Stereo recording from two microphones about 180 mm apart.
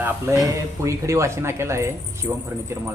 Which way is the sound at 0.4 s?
15° right (ahead or behind).